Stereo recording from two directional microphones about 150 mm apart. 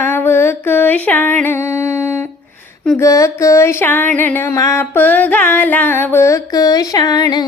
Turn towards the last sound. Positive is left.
turn(degrees=25)  # may be behind; listen again after turning